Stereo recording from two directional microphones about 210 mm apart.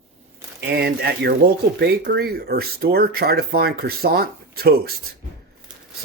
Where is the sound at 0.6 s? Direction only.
50° right (ahead or behind).